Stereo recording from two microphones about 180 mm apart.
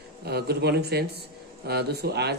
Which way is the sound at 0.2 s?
60° right (ahead or behind).